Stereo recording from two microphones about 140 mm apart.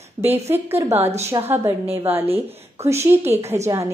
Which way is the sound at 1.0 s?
50° right (ahead or behind).